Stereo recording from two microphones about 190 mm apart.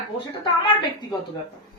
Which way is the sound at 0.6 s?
25° left (ahead or behind).